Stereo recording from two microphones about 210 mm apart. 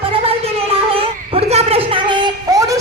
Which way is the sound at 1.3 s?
30° right (ahead or behind).